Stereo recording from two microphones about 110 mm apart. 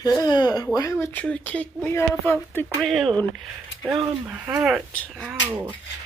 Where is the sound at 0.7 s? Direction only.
25° left (ahead or behind).